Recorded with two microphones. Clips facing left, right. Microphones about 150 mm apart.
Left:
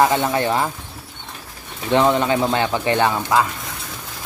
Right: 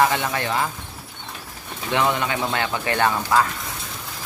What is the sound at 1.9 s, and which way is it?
Speech, 30° left (ahead or behind).